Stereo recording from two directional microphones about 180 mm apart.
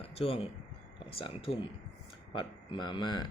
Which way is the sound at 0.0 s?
30° left (ahead or behind).